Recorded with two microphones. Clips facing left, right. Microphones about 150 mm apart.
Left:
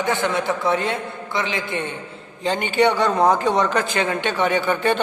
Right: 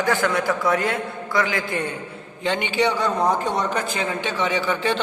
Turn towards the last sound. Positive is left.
turn(degrees=55)  # may be behind; listen again after turning